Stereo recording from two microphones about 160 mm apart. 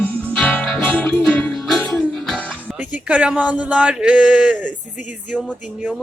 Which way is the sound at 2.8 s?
10° right (ahead or behind).